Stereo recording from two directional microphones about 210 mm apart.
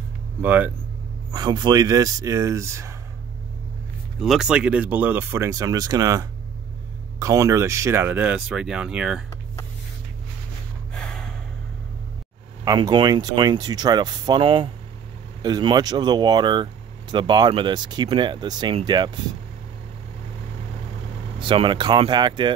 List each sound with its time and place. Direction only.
0.4 s speech: 10° right (ahead or behind)
1.3 s speech: 20° right (ahead or behind)
4.2 s speech: 5° right (ahead or behind)
10.9 s gasp: 5° left (ahead or behind)
12.6 s speech: 20° right (ahead or behind)
21.4 s speech: 25° right (ahead or behind)